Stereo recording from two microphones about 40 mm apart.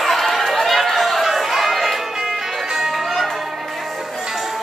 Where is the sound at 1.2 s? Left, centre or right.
Centre.